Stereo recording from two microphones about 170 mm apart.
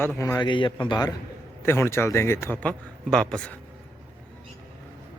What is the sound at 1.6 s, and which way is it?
Speech, 15° left (ahead or behind).